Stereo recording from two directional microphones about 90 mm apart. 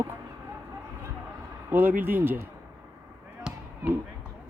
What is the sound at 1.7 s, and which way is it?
Speech, 20° right (ahead or behind).